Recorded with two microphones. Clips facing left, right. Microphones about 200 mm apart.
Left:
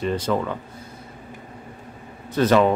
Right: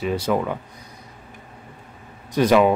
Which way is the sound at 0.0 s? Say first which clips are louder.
Right 1 dB; 10° right (ahead or behind).